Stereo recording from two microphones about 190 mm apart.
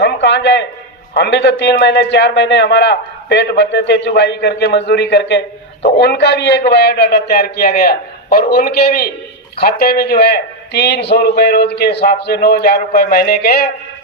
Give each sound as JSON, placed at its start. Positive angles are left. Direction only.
{"t": 0.0, "sound": "a man's voice", "side_deg": 65}